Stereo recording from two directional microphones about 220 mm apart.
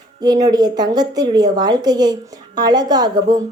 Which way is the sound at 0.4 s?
20° right (ahead or behind).